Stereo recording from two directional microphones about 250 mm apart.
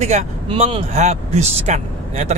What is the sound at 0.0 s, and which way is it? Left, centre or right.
Speech, right.